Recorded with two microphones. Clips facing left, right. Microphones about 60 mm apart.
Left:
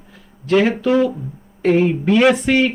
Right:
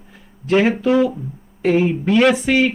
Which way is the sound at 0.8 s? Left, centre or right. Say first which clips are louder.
Even; centre.